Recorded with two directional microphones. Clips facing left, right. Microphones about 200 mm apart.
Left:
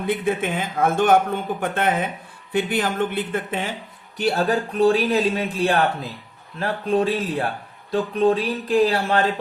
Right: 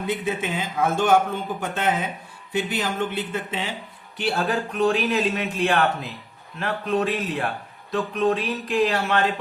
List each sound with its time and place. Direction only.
0.1 s a man's voice: 55° left (ahead or behind)
4.2 s speech: 40° left (ahead or behind)